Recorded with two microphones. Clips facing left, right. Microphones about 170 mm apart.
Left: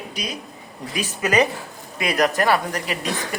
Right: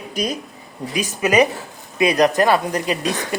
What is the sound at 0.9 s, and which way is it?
Speech, 15° right (ahead or behind).